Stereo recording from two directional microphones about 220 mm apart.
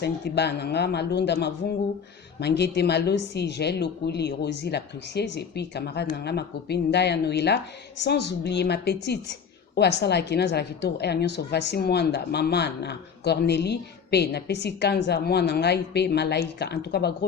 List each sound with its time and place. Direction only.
0.0 s a woman's voice: 50° left (ahead or behind)